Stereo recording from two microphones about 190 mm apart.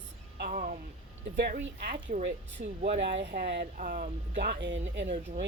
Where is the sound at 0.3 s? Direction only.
45° right (ahead or behind).